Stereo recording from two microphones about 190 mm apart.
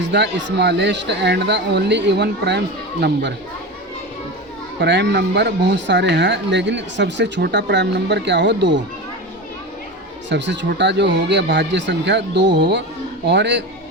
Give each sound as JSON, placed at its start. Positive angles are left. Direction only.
{"t": 0.1, "sound": "speech", "side_deg": -65}
{"t": 4.8, "sound": "speech", "side_deg": -65}
{"t": 10.2, "sound": "speech", "side_deg": -65}